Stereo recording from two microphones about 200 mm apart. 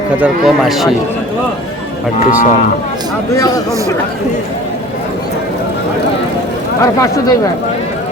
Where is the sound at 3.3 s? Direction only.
20° left (ahead or behind).